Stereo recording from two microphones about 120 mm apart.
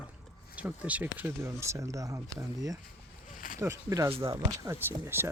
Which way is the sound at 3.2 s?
90° left.